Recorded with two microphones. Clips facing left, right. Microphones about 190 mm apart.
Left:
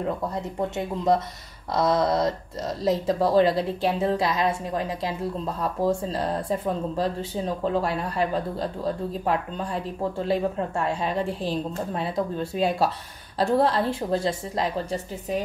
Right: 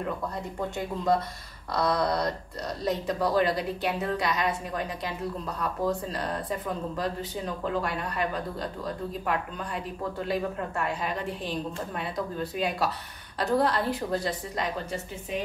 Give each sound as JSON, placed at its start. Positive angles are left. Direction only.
{"t": 0.6, "sound": "speech", "side_deg": 20}